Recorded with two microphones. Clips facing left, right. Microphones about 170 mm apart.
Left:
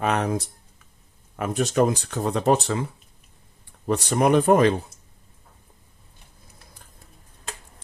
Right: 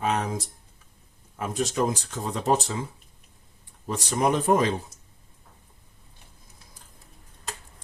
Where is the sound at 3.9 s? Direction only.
60° left (ahead or behind).